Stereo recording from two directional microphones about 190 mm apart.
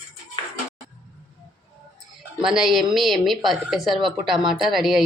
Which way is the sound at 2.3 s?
5° right (ahead or behind).